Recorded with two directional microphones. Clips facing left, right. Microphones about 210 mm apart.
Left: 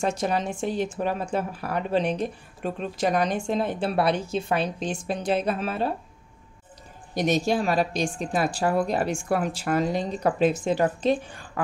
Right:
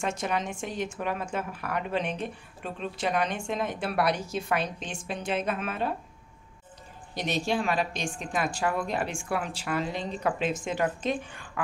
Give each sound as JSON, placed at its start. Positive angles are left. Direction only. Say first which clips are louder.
{"t": 0.0, "sound": "speech", "louder": "left 5 dB", "side_deg": 35}
{"t": 7.2, "sound": "speech", "louder": "left 6 dB", "side_deg": 45}